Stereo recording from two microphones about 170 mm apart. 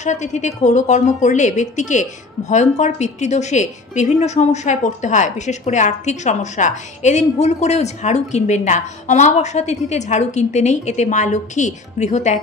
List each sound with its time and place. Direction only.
0.0 s a woman's voice: 45° left (ahead or behind)